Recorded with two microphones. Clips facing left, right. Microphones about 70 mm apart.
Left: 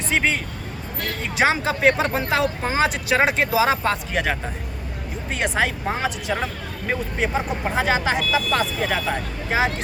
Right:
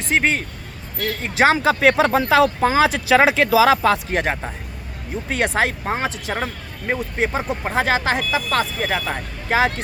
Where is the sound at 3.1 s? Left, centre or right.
Right.